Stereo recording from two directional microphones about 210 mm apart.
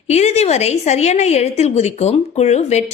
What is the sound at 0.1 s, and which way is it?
A woman's voice, 30° left (ahead or behind).